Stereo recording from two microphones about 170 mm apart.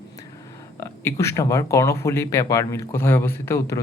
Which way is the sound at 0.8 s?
15° left (ahead or behind).